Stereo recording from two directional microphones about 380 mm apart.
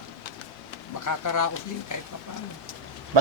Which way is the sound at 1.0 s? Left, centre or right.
Left.